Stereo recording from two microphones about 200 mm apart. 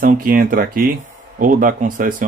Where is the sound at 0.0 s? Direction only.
45° right (ahead or behind).